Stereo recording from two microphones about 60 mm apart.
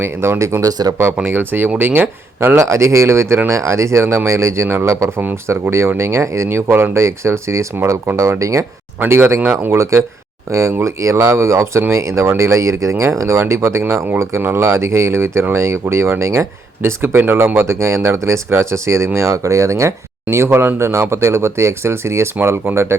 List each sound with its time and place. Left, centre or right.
0.0 s speech: right
0.9 s speech: right
2.6 s speech: right
6.7 s speech: right
6.9 s speech: right
9.0 s speech: right
17.0 s speech: right
17.7 s speech: right
20.3 s speech: right